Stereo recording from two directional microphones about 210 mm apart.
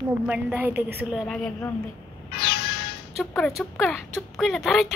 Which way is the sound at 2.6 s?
50° left (ahead or behind).